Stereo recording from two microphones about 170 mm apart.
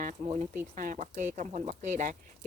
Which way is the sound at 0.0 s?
45° right (ahead or behind).